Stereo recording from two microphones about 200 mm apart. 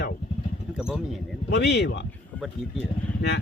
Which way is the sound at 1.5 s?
55° left (ahead or behind).